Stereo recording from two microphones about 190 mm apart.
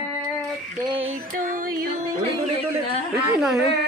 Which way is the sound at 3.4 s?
Centre (ahead or behind).